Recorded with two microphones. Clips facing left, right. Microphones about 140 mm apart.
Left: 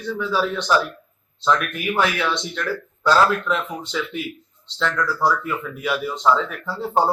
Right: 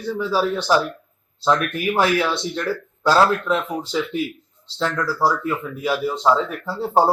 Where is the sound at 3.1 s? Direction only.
30° right (ahead or behind).